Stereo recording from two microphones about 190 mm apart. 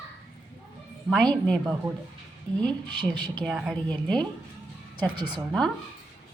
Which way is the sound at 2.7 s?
25° right (ahead or behind).